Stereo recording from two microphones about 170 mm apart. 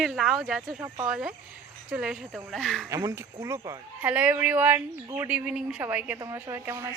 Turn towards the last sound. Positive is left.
turn(degrees=-15)  # may be behind; listen again after turning